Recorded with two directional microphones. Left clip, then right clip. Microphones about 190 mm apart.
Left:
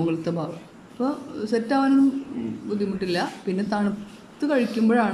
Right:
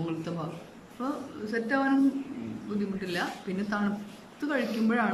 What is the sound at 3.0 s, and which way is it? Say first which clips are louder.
Speech: left 6 dB; 20° left (ahead or behind).